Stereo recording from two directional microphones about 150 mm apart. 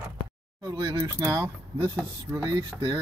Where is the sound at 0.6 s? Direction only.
25° right (ahead or behind).